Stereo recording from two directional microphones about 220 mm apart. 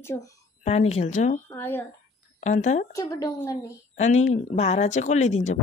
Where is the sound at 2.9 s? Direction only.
15° left (ahead or behind).